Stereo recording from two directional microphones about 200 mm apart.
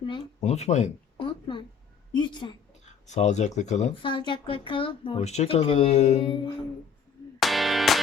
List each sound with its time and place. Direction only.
0.4 s speech: 35° left (ahead or behind)
2.1 s speech: 20° left (ahead or behind)
3.1 s speech: 35° left (ahead or behind)
4.1 s speech: 25° left (ahead or behind)
7.3 s music: centre (ahead or behind)